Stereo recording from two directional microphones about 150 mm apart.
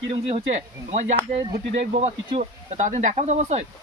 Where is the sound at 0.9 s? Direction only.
50° right (ahead or behind).